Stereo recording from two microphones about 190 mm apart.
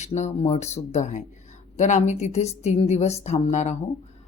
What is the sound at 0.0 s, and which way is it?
A woman's voice, 35° left (ahead or behind).